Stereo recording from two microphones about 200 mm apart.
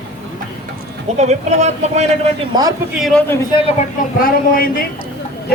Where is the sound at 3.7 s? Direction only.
40° left (ahead or behind).